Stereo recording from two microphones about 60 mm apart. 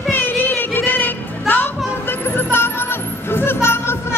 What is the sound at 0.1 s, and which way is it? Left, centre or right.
Music, left.